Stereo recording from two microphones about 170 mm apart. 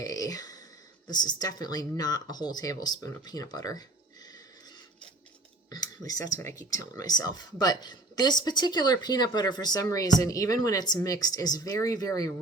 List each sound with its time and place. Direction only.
0.0 s a sound: 20° left (ahead or behind)
1.0 s speech: 25° left (ahead or behind)
5.7 s speech: 20° left (ahead or behind)